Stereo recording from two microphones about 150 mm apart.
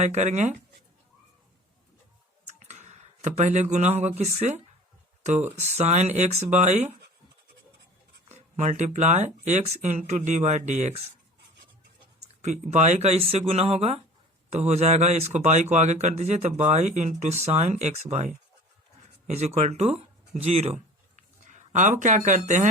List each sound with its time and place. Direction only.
0.0 s speech: 50° right (ahead or behind)
2.5 s a sound: 50° right (ahead or behind)
4.2 s speech: 50° right (ahead or behind)
8.3 s speech: 50° right (ahead or behind)
12.4 s speech: 50° right (ahead or behind)